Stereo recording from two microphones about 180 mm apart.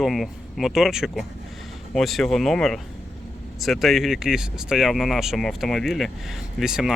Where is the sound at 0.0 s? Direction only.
Centre (ahead or behind).